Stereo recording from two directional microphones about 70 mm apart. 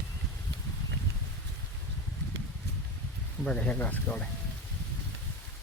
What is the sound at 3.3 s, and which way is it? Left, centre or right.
Speech, centre.